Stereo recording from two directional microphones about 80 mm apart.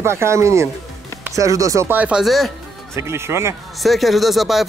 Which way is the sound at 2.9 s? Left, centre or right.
Right.